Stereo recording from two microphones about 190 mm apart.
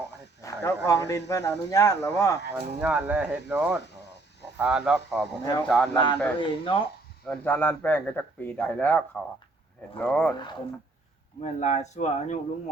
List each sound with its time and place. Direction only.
0.4 s speech: 15° left (ahead or behind)
2.5 s speech: 10° right (ahead or behind)
5.9 s speech: 25° left (ahead or behind)
7.3 s speech: 10° left (ahead or behind)
11.3 s speech: 40° left (ahead or behind)